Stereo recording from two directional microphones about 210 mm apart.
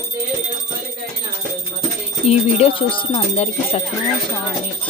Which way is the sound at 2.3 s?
30° left (ahead or behind).